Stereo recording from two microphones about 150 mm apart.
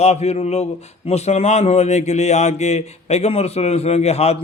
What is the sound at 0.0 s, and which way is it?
A man's voice, 45° left (ahead or behind).